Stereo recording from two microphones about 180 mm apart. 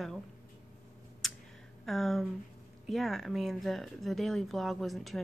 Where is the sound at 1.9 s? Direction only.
Centre (ahead or behind).